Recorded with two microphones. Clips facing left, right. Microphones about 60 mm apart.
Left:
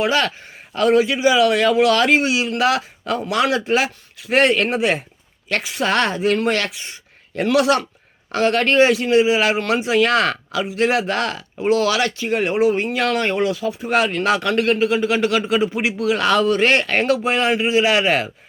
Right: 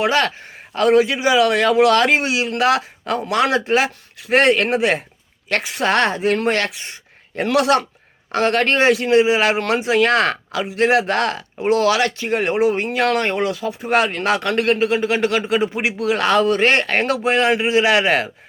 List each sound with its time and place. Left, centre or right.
0.0 s speech: right